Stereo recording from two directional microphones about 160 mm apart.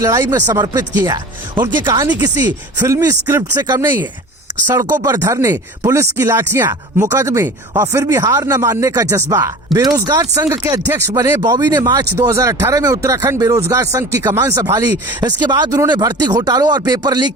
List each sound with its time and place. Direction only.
0.0 s speech: 20° right (ahead or behind)
5.0 s speech: 25° right (ahead or behind)
9.7 s speech: centre (ahead or behind)
10.1 s speech: 25° right (ahead or behind)